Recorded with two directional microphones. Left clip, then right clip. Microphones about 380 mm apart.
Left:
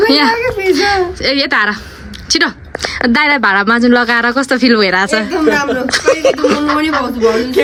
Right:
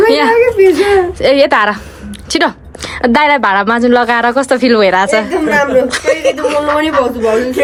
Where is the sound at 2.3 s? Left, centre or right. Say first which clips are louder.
Even; centre.